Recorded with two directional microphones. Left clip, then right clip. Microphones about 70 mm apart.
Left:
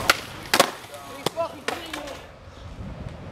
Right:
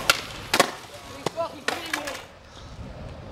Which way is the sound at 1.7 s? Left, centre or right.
Right.